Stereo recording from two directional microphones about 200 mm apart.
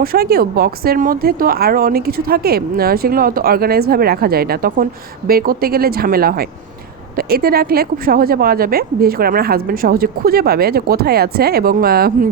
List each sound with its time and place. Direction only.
0.0 s speech: 50° right (ahead or behind)